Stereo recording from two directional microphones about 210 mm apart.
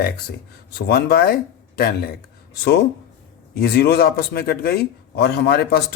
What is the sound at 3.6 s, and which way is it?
Speech, 50° left (ahead or behind).